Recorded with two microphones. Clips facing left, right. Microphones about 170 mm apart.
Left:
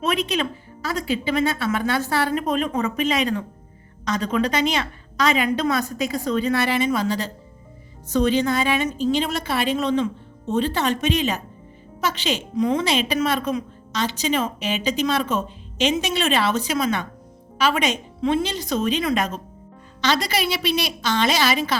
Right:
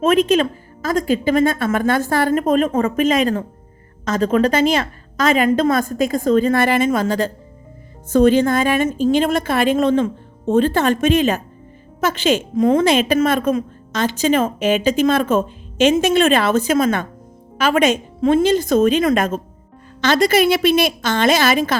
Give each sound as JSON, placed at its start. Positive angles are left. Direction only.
{"t": 0.0, "sound": "a woman's voice", "side_deg": -45}